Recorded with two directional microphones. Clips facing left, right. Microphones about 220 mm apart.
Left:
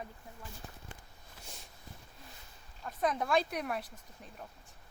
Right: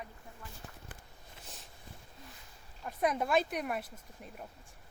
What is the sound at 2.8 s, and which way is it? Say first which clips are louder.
A woman's voice: right 1 dB; 10° right (ahead or behind).